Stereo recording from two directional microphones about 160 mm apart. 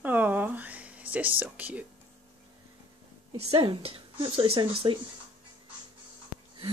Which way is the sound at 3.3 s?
35° right (ahead or behind).